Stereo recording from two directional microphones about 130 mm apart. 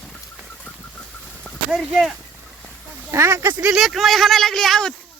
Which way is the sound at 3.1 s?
20° right (ahead or behind).